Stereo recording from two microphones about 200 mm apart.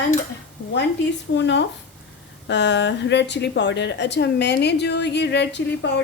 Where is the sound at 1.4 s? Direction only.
60° left (ahead or behind).